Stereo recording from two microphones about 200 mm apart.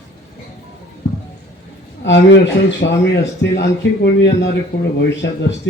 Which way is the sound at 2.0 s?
65° left (ahead or behind).